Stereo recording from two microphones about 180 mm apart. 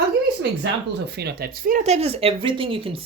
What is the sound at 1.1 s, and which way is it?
Speech, 65° right (ahead or behind).